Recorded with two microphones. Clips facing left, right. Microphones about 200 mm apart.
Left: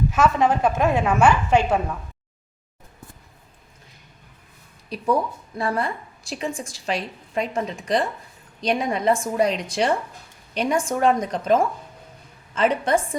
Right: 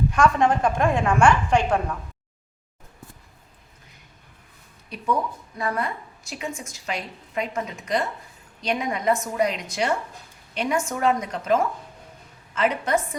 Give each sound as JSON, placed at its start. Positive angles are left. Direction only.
{"t": 0.1, "sound": "a woman's voice", "side_deg": 5}
{"t": 4.9, "sound": "a woman's voice", "side_deg": 35}
{"t": 12.5, "sound": "a woman's voice", "side_deg": 30}